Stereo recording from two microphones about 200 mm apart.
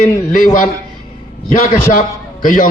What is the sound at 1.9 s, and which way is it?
Speech, 45° left (ahead or behind).